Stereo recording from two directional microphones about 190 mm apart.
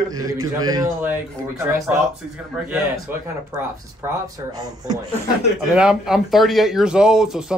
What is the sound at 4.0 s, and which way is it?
Speech, 20° right (ahead or behind).